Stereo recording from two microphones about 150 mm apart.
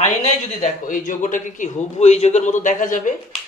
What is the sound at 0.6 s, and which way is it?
A man's voice, 60° left (ahead or behind).